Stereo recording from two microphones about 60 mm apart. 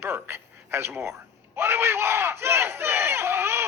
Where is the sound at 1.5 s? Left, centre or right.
Right.